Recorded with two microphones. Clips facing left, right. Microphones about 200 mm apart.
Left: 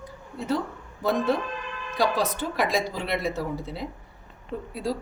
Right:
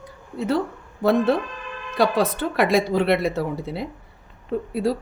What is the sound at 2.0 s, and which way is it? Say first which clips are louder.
A woman's voice: right 5 dB; 60° right (ahead or behind).